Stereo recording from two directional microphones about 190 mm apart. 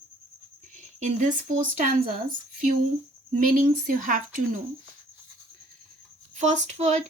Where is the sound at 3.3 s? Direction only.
45° right (ahead or behind).